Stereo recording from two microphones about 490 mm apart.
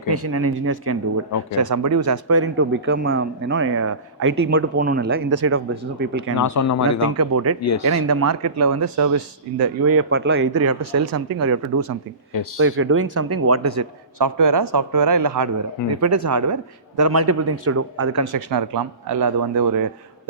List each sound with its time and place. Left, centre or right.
0.1 s speech: right
5.7 s speech: centre
6.3 s speech: left
7.2 s speech: right
10.8 s speech: right
12.5 s speech: right
18.3 s speech: right